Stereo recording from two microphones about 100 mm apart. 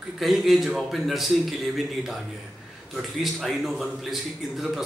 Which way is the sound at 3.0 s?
Centre (ahead or behind).